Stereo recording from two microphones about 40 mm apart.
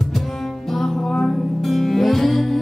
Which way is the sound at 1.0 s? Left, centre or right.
Centre.